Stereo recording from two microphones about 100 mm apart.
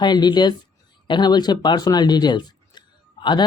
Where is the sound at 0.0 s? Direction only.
50° left (ahead or behind).